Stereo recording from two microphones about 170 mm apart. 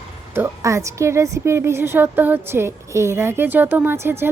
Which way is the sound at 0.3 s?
15° right (ahead or behind).